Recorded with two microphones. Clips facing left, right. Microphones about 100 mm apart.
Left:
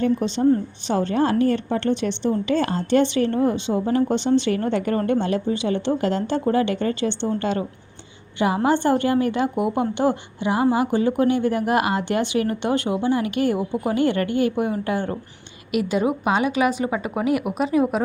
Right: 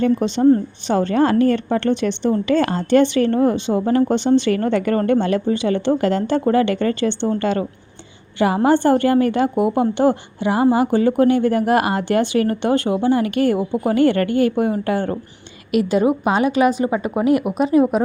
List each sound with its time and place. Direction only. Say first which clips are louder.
0.0 s a woman's voice: right 4 dB; 65° right (ahead or behind); by 17.5 s 35° right (ahead or behind)